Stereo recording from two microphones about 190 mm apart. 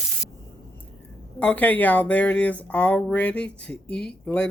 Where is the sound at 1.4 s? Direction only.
5° left (ahead or behind).